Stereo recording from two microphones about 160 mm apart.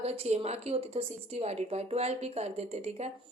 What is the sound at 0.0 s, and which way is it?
A woman's voice, 40° right (ahead or behind).